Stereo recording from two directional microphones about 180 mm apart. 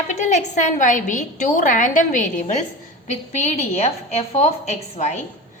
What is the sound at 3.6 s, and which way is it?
A woman's voice, 35° left (ahead or behind).